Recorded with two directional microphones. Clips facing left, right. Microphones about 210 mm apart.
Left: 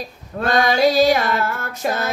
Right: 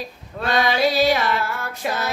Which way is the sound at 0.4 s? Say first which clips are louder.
Left 3 dB; 45° left (ahead or behind).